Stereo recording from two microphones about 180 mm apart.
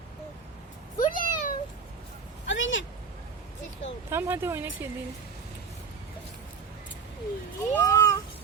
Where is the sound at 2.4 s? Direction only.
90° left.